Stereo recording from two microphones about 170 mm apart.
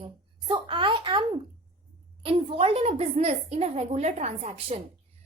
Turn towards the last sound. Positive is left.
turn(degrees=-40)  # may be behind; listen again after turning